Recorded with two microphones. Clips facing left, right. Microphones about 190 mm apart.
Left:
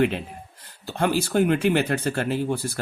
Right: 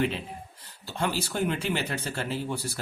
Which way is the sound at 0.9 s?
55° left (ahead or behind).